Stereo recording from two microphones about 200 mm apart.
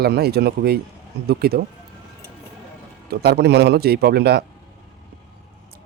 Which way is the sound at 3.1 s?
55° right (ahead or behind).